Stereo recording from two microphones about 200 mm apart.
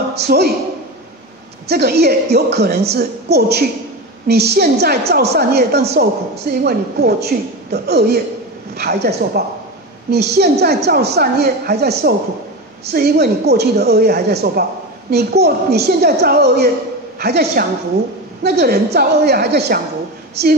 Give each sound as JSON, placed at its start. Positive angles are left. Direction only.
{"t": 0.2, "sound": "a woman's voice", "side_deg": -55}
{"t": 1.7, "sound": "a woman's voice", "side_deg": -55}